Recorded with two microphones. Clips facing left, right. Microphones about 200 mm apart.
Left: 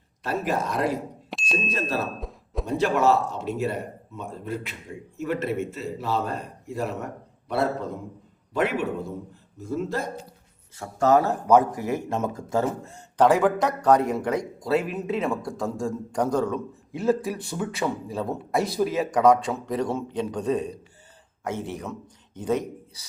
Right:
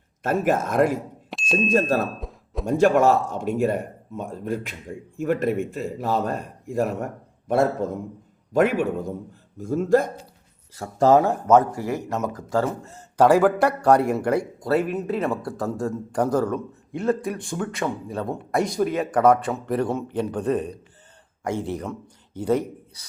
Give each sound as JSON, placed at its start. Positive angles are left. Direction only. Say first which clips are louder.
{"t": 0.2, "sound": "speech", "louder": "right 5 dB", "side_deg": -50}
{"t": 1.3, "sound": "a sound", "louder": "right 8 dB", "side_deg": 0}
{"t": 1.5, "sound": "speech", "louder": "right 7 dB", "side_deg": -50}
{"t": 2.1, "sound": "a sound", "louder": "even", "side_deg": 0}
{"t": 2.6, "sound": "speech", "louder": "right 4 dB", "side_deg": -45}
{"t": 10.8, "sound": "speech", "louder": "right 3 dB", "side_deg": -30}
{"t": 11.3, "sound": "speech", "louder": "right 2 dB", "side_deg": 15}
{"t": 12.8, "sound": "speech", "louder": "right 3 dB", "side_deg": -5}
{"t": 21.4, "sound": "a man's voice", "louder": "right 4 dB", "side_deg": -15}